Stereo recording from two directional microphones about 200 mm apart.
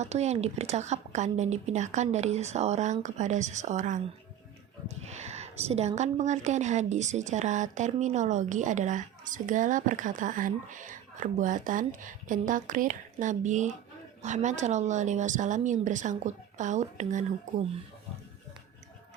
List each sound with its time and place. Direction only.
0.0 s speech: 35° right (ahead or behind)
5.0 s a sound: 35° right (ahead or behind)
6.0 s speech: 35° right (ahead or behind)